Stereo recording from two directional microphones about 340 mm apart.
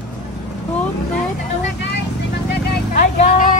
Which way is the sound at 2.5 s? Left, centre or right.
Left.